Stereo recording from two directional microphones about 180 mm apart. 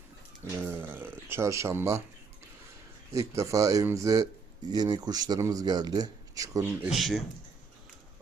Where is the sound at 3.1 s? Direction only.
20° right (ahead or behind).